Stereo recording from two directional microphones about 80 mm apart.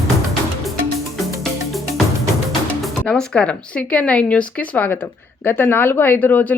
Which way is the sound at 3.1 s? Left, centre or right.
Centre.